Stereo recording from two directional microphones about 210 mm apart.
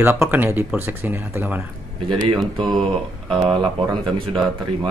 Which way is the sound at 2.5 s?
20° right (ahead or behind).